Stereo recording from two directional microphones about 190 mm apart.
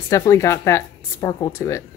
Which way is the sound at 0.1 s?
15° left (ahead or behind).